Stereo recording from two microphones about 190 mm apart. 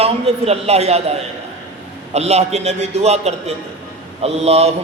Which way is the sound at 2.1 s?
35° right (ahead or behind).